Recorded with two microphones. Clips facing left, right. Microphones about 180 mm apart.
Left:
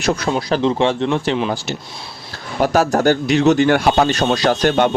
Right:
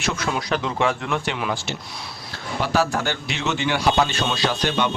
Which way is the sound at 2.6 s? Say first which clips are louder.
Left 7 dB; 45° left (ahead or behind).